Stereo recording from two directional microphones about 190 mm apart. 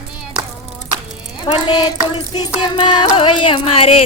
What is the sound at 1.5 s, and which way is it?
Music, 25° left (ahead or behind).